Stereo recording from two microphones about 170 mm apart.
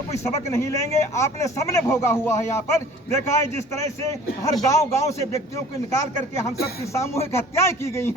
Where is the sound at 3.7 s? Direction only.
20° left (ahead or behind).